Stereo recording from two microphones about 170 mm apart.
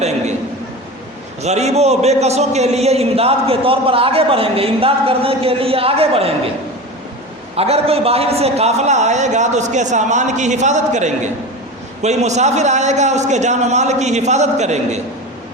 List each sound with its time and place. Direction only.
1.4 s a man's voice: 40° right (ahead or behind)
7.5 s a man's voice: 35° right (ahead or behind)